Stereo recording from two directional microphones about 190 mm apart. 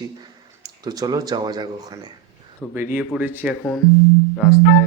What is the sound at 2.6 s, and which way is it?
Speech, 5° left (ahead or behind).